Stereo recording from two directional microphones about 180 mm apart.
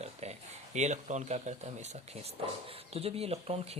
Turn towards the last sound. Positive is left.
turn(degrees=-35)  # may be behind; listen again after turning